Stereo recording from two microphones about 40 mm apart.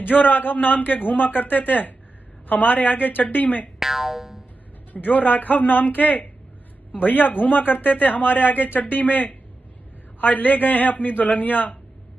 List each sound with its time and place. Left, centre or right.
0.0 s speech: left
3.8 s speech: centre
4.9 s speech: left